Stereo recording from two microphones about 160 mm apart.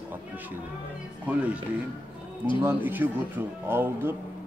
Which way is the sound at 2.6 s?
10° right (ahead or behind).